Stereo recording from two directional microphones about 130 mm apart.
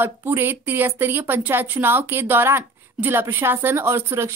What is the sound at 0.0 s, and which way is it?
A woman's voice, 15° right (ahead or behind).